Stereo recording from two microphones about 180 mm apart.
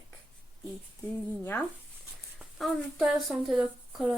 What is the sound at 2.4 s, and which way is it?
Speech, centre (ahead or behind).